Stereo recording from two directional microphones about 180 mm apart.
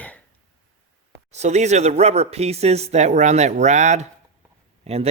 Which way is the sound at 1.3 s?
40° right (ahead or behind).